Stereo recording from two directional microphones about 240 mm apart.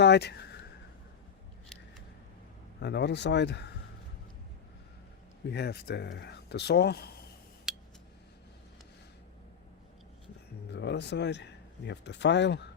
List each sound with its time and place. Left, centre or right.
0.0 s a sound: left
2.8 s speech: left
5.5 s speech: left
7.7 s scissors: centre
10.7 s speech: left